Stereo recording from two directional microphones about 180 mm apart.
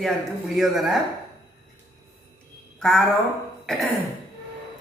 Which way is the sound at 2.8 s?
5° left (ahead or behind).